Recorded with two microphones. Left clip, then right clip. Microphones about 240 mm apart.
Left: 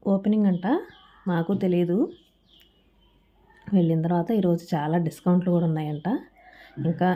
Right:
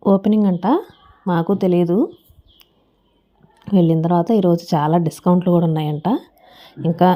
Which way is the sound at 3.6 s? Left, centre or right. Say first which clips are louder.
Right 8 dB; right.